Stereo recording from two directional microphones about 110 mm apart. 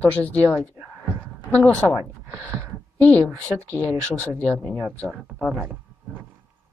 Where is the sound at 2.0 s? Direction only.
25° right (ahead or behind).